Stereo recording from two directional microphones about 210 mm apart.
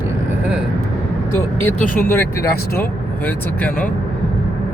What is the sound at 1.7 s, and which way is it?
Speech, 40° left (ahead or behind).